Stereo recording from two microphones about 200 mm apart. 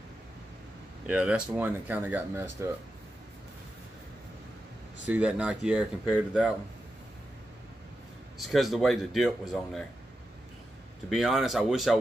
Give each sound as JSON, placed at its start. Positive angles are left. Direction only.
{"t": 1.0, "sound": "speech", "side_deg": -5}
{"t": 5.0, "sound": "speech", "side_deg": -5}
{"t": 8.4, "sound": "speech", "side_deg": 0}
{"t": 11.1, "sound": "speech", "side_deg": 0}